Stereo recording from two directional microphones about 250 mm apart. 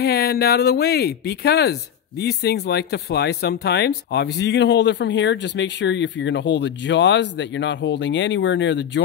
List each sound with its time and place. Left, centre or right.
0.0 s speech: left